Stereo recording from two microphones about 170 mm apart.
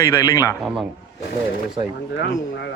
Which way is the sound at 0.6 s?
5° right (ahead or behind).